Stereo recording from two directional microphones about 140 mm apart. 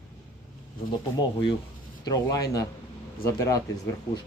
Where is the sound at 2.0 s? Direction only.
25° left (ahead or behind).